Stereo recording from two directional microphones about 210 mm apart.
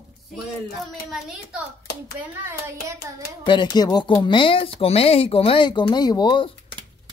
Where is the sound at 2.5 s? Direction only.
15° right (ahead or behind).